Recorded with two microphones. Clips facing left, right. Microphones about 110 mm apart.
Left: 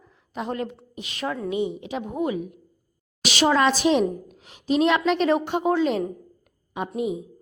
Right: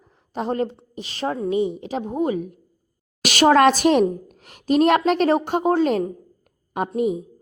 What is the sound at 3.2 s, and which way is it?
A woman's voice, 50° right (ahead or behind).